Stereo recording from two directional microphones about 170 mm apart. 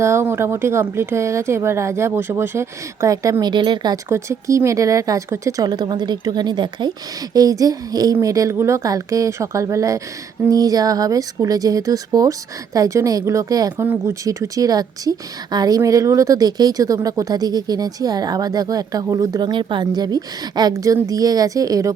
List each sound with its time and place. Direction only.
0.0 s speech: 15° right (ahead or behind)